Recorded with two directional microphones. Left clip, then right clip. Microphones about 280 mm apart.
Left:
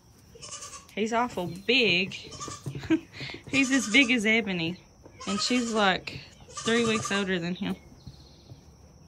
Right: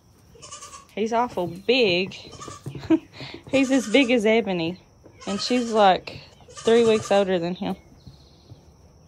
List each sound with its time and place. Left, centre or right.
0.9 s speech: centre